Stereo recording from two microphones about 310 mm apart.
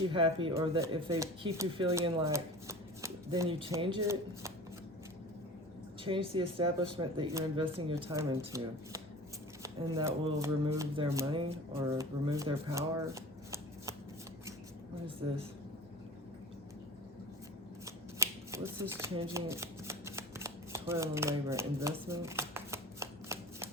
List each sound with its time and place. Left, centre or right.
0.0 s speech: centre
6.1 s speech: centre
15.2 s speech: centre
17.8 s shuffling cards: centre